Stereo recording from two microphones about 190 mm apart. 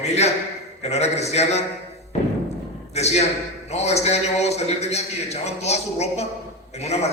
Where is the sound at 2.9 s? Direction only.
35° left (ahead or behind).